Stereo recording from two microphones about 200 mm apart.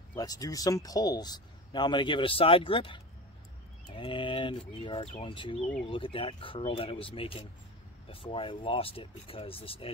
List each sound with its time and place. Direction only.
0.1 s speech: 20° left (ahead or behind)